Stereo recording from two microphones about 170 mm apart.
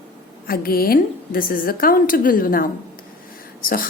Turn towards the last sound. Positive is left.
turn(degrees=55)  # may be behind; listen again after turning